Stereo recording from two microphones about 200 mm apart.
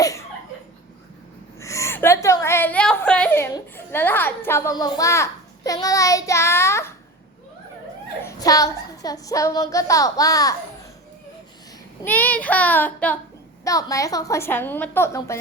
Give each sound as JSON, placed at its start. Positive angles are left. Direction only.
{"t": 0.0, "sound": "laughter", "side_deg": 15}
{"t": 1.5, "sound": "a woman's voice", "side_deg": 15}
{"t": 8.2, "sound": "a woman's voice", "side_deg": 15}
{"t": 12.0, "sound": "a woman's voice", "side_deg": 10}